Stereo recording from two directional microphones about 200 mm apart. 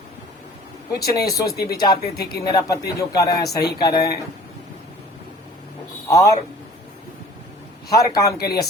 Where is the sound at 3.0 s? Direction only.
15° left (ahead or behind).